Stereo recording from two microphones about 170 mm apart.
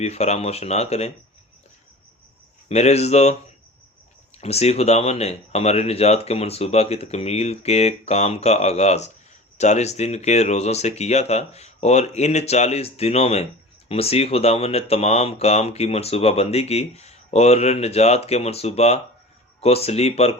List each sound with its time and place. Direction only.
0.0 s speech: 40° left (ahead or behind)
2.6 s speech: 40° left (ahead or behind)
4.4 s speech: 40° left (ahead or behind)